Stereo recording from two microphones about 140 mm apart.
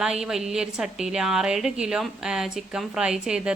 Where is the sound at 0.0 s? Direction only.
5° right (ahead or behind).